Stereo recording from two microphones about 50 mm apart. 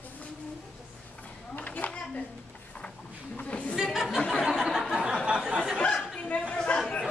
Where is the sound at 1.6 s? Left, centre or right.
Left.